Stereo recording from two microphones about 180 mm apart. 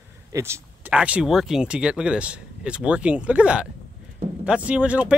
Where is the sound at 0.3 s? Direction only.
15° right (ahead or behind).